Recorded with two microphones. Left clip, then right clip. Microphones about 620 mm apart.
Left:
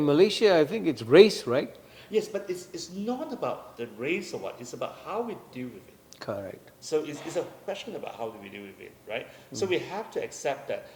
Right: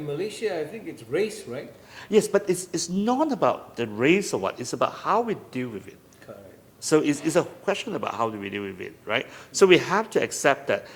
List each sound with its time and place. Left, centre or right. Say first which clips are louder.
0.1 s speech: left 7 dB; left
2.0 s a man's voice: right 8 dB; right
6.8 s a man's voice: right 8 dB; right